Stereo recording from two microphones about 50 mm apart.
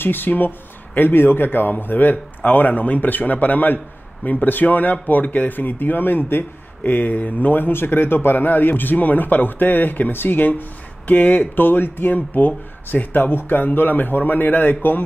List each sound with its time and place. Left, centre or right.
0.0 s a man's voice: left